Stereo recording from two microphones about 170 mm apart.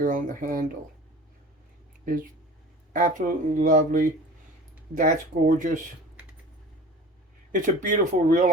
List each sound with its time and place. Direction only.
0.0 s speech: 50° right (ahead or behind)
2.9 s speech: 50° right (ahead or behind)
7.5 s speech: 50° right (ahead or behind)